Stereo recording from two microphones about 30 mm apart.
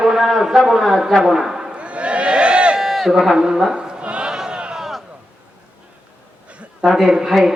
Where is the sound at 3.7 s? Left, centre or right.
Right.